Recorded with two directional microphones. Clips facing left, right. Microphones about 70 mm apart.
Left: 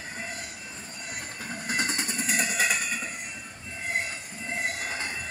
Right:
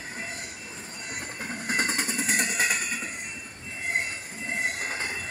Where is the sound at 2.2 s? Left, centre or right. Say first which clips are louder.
Even; right.